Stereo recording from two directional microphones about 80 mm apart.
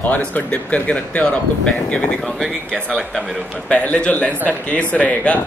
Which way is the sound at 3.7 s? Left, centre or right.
Centre.